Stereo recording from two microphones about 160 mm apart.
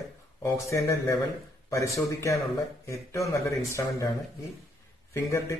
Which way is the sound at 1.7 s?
20° left (ahead or behind).